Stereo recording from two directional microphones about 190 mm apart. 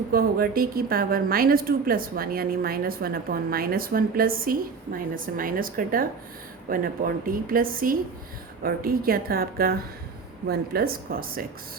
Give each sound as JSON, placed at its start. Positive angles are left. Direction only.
{"t": 0.1, "sound": "a woman's voice", "side_deg": -50}